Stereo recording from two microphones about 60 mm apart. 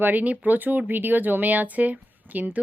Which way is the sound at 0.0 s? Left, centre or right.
Right.